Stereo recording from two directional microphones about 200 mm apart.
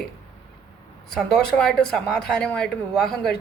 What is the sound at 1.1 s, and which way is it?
A woman's voice, centre (ahead or behind).